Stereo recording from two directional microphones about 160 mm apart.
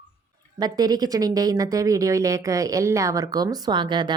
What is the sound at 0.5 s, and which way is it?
Speech, 25° right (ahead or behind).